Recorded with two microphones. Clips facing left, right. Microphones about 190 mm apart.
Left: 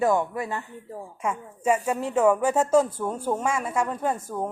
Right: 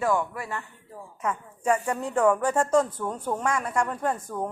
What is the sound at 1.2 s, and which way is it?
A woman's voice, 10° left (ahead or behind).